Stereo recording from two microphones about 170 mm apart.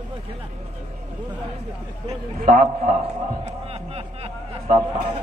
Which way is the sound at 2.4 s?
55° right (ahead or behind).